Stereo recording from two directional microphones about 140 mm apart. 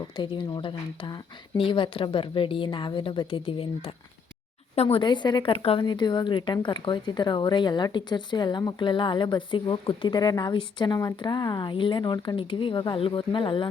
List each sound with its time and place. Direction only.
0.2 s speech: 35° left (ahead or behind)